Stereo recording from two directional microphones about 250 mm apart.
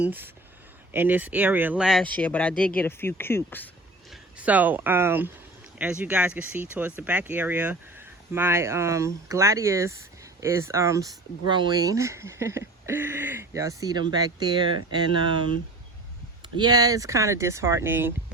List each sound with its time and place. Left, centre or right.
0.0 s speech: centre
4.1 s speech: centre
16.6 s speech: centre